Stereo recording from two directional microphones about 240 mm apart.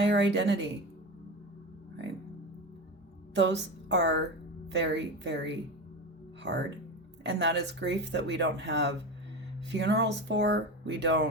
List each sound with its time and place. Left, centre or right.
0.0 s speech: right
3.3 s speech: right